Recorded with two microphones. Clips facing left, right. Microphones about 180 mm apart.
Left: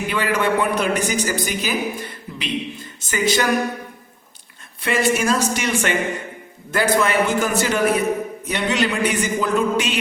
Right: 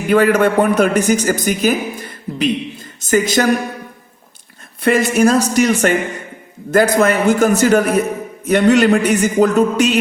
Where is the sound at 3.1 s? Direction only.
45° right (ahead or behind).